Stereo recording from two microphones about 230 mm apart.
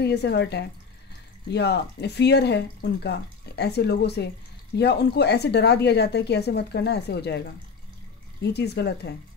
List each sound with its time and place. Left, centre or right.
0.0 s speech: left
8.4 s speech: left